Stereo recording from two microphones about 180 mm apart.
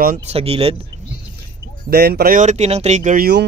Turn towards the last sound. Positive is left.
turn(degrees=-55)  # may be behind; listen again after turning